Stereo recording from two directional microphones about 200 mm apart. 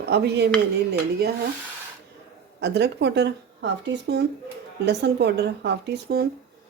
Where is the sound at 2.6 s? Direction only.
60° right (ahead or behind).